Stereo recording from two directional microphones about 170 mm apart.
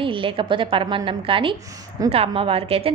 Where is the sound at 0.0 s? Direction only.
30° right (ahead or behind).